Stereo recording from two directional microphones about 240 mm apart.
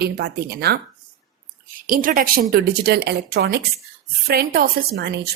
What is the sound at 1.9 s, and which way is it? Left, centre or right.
A woman's voice, right.